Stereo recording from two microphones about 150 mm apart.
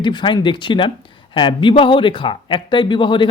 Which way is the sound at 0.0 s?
30° left (ahead or behind).